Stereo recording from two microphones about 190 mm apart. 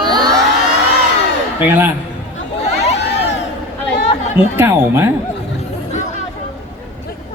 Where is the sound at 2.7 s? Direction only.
35° left (ahead or behind).